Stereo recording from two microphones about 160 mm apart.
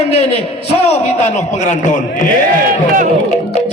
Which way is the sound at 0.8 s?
40° left (ahead or behind).